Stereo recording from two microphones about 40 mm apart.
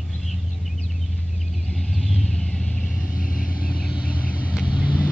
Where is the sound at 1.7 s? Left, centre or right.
Centre.